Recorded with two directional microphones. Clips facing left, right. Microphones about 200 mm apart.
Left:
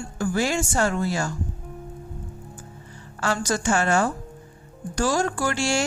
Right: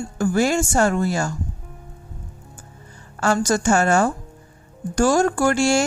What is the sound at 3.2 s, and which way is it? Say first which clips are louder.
Speech: right 5 dB; 45° right (ahead or behind).